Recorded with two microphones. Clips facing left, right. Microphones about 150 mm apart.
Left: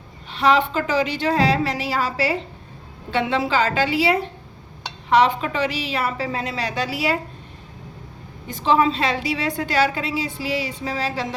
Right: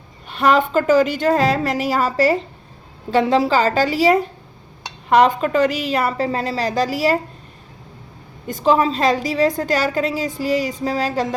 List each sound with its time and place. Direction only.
0.3 s a woman's voice: 50° right (ahead or behind)
8.4 s a woman's voice: 45° right (ahead or behind)